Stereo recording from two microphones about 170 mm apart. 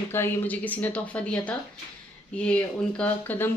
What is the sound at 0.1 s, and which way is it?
Speech, 10° left (ahead or behind).